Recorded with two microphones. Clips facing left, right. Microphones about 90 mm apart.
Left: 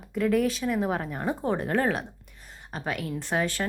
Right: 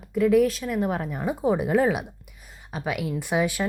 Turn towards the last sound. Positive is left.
turn(degrees=-10)  # may be behind; listen again after turning